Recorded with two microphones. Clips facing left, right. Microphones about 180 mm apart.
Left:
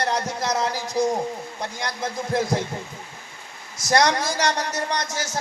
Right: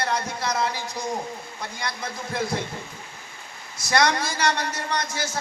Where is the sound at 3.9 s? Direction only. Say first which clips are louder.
Left 2 dB; 45° left (ahead or behind).